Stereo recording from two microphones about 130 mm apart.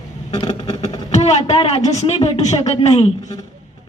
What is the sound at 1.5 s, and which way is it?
A woman's voice, 50° left (ahead or behind).